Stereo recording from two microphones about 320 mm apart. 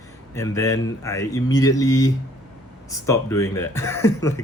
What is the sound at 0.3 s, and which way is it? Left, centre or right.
Speech, centre.